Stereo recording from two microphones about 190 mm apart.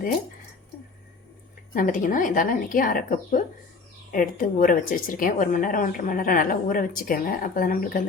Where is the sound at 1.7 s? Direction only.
45° left (ahead or behind).